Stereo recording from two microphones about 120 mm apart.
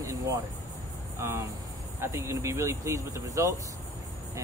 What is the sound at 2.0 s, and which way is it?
Speech, 25° right (ahead or behind).